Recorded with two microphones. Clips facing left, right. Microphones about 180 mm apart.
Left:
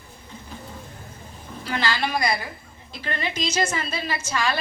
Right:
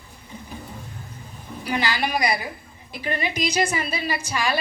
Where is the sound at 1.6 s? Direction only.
15° right (ahead or behind).